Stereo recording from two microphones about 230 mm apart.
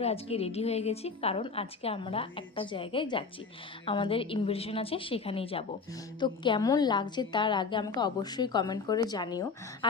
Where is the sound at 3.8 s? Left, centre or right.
Left.